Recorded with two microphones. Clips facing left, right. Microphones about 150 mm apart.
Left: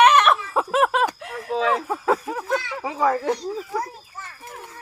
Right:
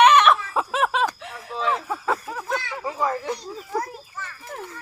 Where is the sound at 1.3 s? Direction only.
75° left (ahead or behind).